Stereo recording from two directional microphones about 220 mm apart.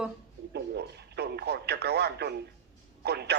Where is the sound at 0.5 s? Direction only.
50° right (ahead or behind).